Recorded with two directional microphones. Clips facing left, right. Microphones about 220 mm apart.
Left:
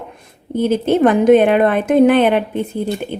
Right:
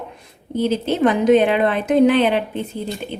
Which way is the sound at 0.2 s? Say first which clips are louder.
Left 3 dB; 50° left (ahead or behind).